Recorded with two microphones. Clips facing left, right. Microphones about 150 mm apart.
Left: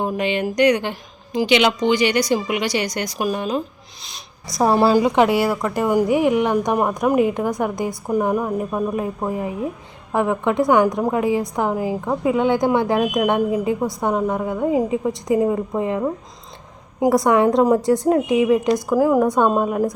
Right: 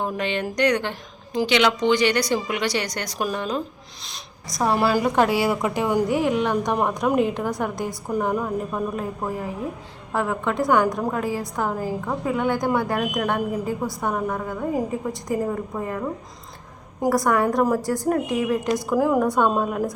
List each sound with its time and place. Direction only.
0.0 s a woman's voice: 15° left (ahead or behind)
4.6 s a woman's voice: 30° left (ahead or behind); by 5.3 s 15° left (ahead or behind)
5.4 s a woman's voice: 10° right (ahead or behind)
5.8 s a woman's voice: 10° left (ahead or behind)